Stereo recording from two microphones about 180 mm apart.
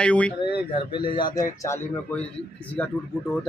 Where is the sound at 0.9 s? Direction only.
25° left (ahead or behind).